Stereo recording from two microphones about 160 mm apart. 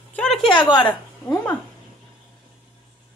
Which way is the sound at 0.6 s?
25° left (ahead or behind).